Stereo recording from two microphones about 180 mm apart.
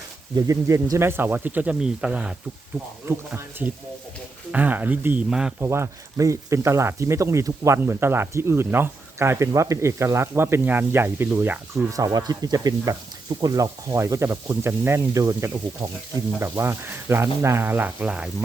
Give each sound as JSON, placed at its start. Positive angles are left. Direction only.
{"t": 0.3, "sound": "speech", "side_deg": -15}